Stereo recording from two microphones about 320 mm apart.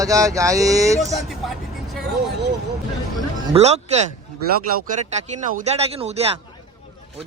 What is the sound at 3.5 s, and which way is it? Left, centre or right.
Speech, centre.